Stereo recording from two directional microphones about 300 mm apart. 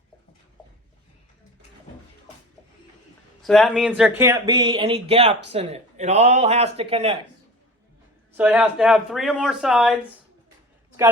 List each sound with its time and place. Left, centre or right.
3.4 s speech: centre
8.4 s speech: centre